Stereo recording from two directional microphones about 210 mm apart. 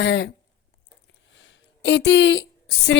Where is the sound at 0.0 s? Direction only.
60° left (ahead or behind).